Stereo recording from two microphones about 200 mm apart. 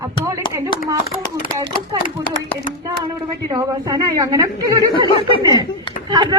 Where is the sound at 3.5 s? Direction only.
15° right (ahead or behind).